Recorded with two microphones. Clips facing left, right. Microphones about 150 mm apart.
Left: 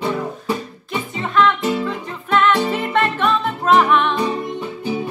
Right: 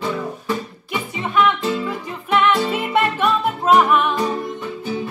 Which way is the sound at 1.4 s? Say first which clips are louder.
Left 2 dB; 10° right (ahead or behind).